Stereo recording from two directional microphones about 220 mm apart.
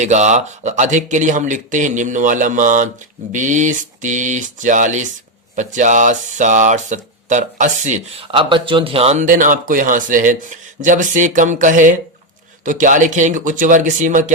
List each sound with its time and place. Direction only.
0.0 s speech: 30° right (ahead or behind)